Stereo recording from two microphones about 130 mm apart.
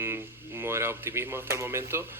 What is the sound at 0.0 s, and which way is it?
Speech, 20° right (ahead or behind).